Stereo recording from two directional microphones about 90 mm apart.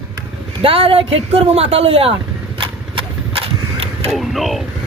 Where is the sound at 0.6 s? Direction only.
90° right.